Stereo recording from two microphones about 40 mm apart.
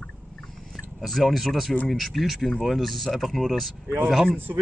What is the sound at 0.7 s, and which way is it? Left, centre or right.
Speech, centre.